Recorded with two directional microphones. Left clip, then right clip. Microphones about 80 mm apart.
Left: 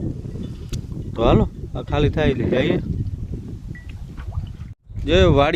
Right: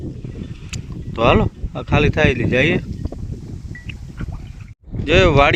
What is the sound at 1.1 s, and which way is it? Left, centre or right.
Speech, centre.